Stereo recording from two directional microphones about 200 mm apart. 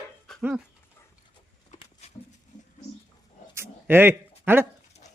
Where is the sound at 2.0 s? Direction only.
30° left (ahead or behind).